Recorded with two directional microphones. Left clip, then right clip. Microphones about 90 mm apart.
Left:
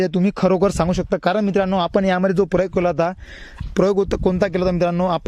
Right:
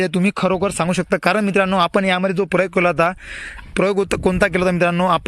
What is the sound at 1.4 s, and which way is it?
Speech, 25° left (ahead or behind).